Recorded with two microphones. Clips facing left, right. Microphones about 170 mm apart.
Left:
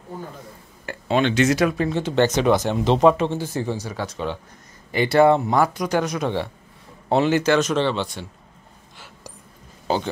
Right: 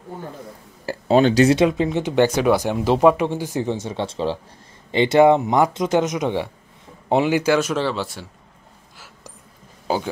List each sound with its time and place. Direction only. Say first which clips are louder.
0.8 s speech: right 5 dB; 35° right (ahead or behind); by 8.3 s 5° right (ahead or behind)
8.9 s a sound: left 2 dB; 5° right (ahead or behind)
9.9 s speech: even; 10° right (ahead or behind)